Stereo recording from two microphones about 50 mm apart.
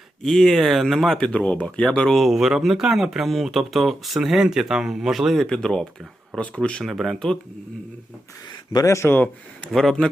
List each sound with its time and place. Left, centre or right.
0.2 s speech: centre
1.2 s speech: left
2.0 s speech: centre
5.5 s speech: centre
6.8 s speech: centre
8.8 s speech: left
9.7 s speech: centre